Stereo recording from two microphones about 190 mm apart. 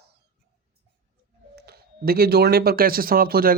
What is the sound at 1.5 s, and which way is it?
Speech, 55° right (ahead or behind).